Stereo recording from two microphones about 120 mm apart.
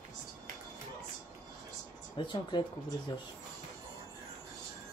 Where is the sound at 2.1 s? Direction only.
40° left (ahead or behind).